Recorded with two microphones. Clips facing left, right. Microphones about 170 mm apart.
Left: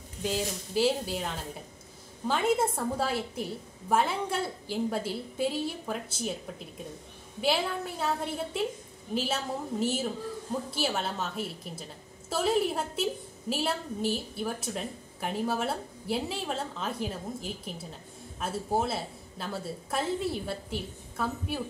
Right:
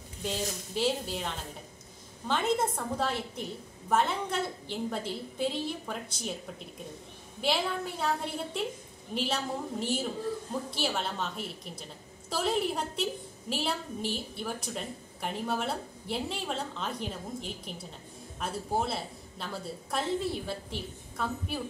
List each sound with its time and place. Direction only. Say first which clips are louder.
0.2 s a woman's voice: left 3 dB; 5° left (ahead or behind)
7.4 s a woman's voice: left 1 dB; centre (ahead or behind)
9.1 s a woman's voice: left 1 dB; centre (ahead or behind)